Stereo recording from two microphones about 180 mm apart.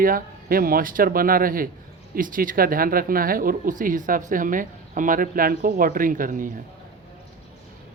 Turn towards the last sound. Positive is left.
turn(degrees=-50)  # may be behind; listen again after turning